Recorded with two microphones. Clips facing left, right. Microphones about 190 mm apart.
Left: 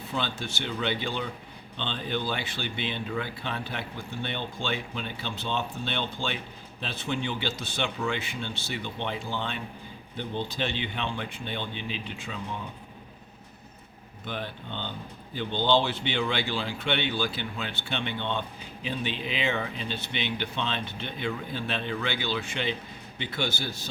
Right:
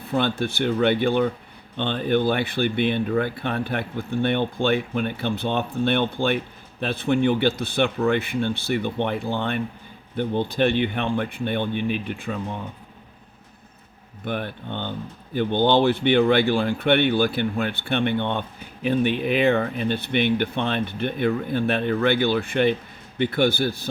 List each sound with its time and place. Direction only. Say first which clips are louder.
0.0 s speech: right 9 dB; 55° right (ahead or behind)
14.3 s speech: right 7 dB; 55° right (ahead or behind)